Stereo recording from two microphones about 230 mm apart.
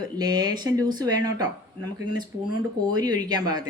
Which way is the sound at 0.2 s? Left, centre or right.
Centre.